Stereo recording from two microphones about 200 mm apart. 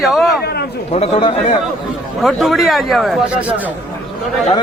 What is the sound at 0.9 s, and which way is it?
Speech, 30° left (ahead or behind).